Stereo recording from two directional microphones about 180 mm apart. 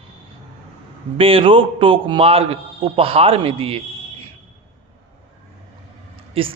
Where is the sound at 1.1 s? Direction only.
30° right (ahead or behind).